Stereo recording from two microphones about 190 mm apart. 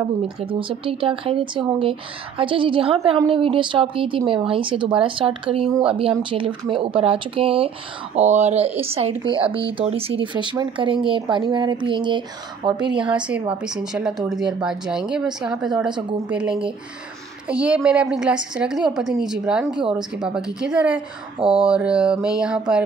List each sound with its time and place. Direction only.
0.4 s speech: 30° right (ahead or behind)
13.1 s speech: 5° right (ahead or behind)
21.4 s speech: 30° right (ahead or behind)
21.6 s speech: 5° right (ahead or behind)